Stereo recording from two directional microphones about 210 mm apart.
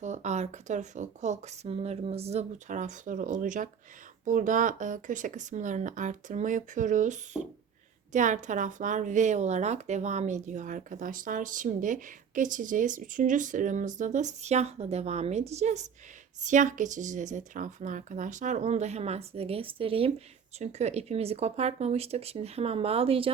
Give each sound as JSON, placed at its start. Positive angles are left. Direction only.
{"t": 0.0, "sound": "a woman's voice", "side_deg": -35}